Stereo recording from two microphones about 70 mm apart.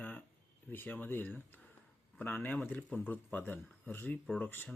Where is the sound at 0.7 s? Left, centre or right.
Left.